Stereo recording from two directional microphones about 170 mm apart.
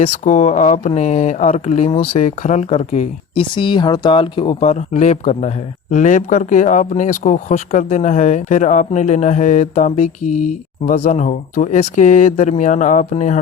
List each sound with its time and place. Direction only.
0.0 s speech: 45° left (ahead or behind)